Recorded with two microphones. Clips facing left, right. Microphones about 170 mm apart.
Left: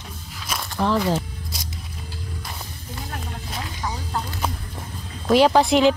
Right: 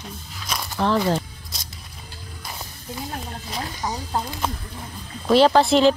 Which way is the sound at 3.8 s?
20° right (ahead or behind).